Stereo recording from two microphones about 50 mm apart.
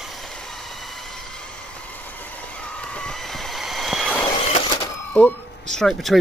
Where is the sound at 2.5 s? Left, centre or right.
Left.